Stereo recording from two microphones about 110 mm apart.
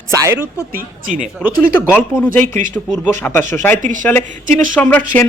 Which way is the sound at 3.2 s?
20° left (ahead or behind).